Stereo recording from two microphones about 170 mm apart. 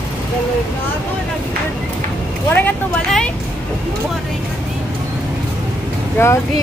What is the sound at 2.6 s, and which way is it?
Speech, 5° left (ahead or behind).